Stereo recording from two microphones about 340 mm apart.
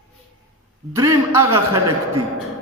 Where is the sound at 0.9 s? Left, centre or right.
Centre.